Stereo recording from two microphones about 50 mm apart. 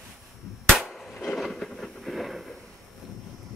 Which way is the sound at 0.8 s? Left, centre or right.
Centre.